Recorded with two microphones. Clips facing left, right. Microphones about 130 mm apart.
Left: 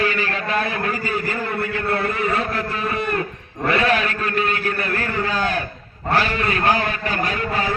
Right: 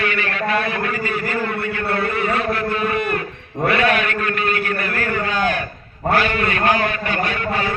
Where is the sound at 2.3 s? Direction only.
35° left (ahead or behind).